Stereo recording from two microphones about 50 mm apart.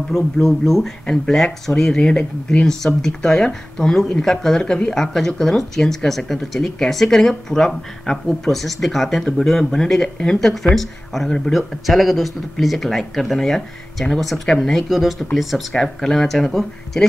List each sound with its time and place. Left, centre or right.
0.2 s speech: centre
10.4 s speech: centre
11.5 s speech: centre